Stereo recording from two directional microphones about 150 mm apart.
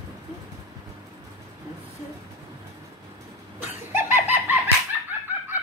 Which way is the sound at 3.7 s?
15° right (ahead or behind).